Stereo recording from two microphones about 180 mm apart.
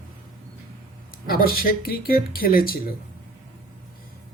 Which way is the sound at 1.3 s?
55° left (ahead or behind).